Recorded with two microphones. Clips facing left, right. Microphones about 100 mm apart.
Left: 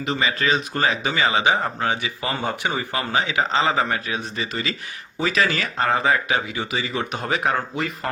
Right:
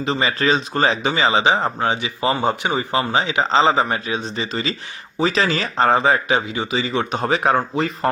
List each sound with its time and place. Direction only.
0.0 s speech: 35° right (ahead or behind)